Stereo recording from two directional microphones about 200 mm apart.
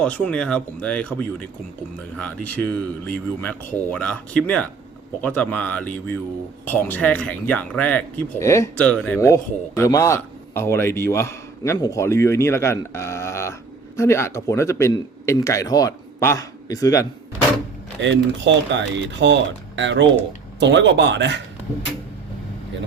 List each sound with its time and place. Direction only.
0.0 s speech: 5° left (ahead or behind)
18.0 s speech: 65° right (ahead or behind)